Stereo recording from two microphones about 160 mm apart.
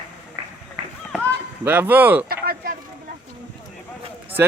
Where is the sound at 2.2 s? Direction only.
70° right (ahead or behind).